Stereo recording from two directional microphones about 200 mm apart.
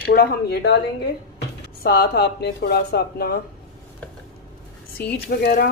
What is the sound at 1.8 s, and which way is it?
Speech, 50° left (ahead or behind).